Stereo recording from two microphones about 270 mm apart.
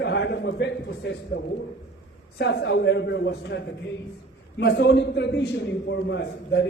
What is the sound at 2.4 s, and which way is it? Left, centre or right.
A man's voice, left.